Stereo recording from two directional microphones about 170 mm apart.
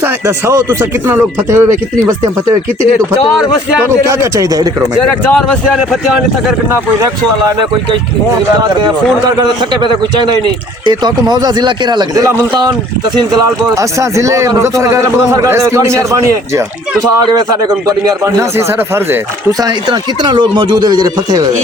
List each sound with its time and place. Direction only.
0.3 s a man's voice: 15° right (ahead or behind)
4.1 s speech: 20° right (ahead or behind)
5.3 s speech: centre (ahead or behind)
10.8 s speech: 25° right (ahead or behind)
14.0 s a man's voice: 20° right (ahead or behind)
18.3 s a man's voice: 15° right (ahead or behind)